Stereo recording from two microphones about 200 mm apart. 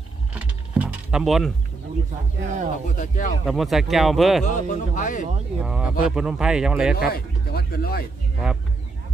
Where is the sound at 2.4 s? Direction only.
40° right (ahead or behind).